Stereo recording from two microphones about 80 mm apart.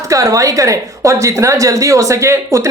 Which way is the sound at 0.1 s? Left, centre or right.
Right.